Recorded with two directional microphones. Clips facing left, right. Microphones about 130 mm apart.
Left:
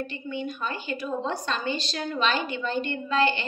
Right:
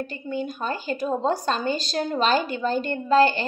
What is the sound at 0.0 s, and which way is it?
A woman's voice, 40° right (ahead or behind).